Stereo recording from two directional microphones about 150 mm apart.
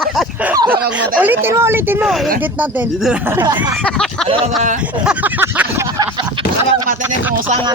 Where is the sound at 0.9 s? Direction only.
10° right (ahead or behind).